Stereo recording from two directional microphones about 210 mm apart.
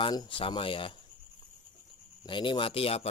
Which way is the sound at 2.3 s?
25° left (ahead or behind).